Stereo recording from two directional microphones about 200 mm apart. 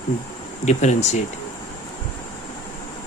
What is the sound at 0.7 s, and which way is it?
Speech, 35° left (ahead or behind).